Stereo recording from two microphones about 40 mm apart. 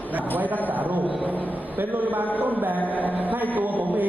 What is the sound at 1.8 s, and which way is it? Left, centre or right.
A man's voice, right.